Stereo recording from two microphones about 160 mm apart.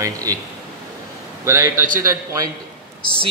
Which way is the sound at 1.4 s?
15° right (ahead or behind).